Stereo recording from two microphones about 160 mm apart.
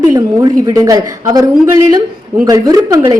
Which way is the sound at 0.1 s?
20° right (ahead or behind).